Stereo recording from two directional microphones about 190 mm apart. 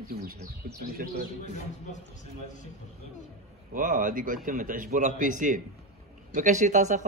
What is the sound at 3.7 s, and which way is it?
A man's voice, 45° right (ahead or behind).